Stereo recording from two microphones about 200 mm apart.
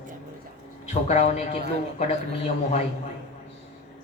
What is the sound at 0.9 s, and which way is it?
Speech, 35° left (ahead or behind).